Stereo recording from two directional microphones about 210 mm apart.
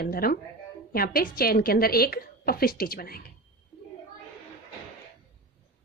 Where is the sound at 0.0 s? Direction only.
45° left (ahead or behind).